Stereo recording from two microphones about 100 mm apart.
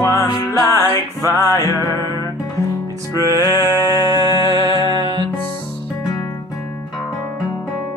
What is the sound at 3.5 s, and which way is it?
Music, 40° right (ahead or behind).